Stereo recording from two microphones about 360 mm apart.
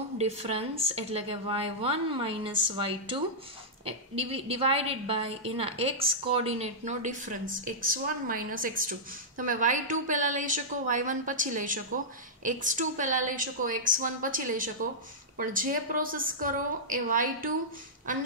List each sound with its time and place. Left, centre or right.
0.2 s a woman's voice: centre